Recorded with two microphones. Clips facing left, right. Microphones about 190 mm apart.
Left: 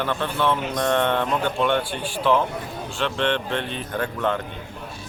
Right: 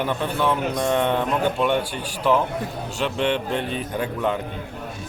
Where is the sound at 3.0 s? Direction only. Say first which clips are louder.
Right 1 dB; 5° right (ahead or behind).